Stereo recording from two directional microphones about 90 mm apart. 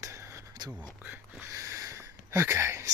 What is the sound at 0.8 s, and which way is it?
Speech, 20° right (ahead or behind).